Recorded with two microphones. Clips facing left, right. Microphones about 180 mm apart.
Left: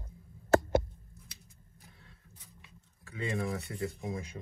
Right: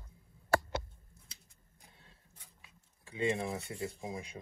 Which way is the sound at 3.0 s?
25° right (ahead or behind).